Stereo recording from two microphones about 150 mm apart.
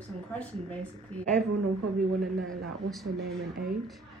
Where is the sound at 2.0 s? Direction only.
65° right (ahead or behind).